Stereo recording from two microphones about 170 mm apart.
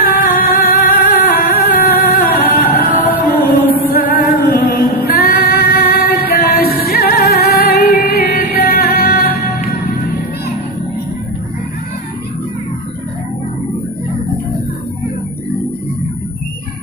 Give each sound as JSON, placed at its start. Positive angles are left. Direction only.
{"t": 0.0, "sound": "music", "side_deg": 55}